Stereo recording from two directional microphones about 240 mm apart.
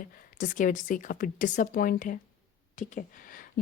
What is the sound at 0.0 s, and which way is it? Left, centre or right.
A woman's voice, left.